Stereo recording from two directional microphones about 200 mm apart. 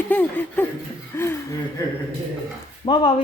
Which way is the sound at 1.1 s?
10° left (ahead or behind).